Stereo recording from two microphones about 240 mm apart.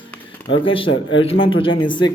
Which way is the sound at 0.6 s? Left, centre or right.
Left.